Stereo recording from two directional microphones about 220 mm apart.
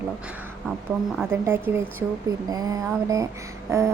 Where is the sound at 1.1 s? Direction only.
10° right (ahead or behind).